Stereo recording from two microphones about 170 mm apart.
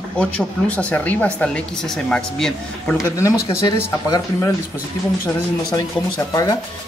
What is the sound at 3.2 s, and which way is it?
Speech, 25° left (ahead or behind).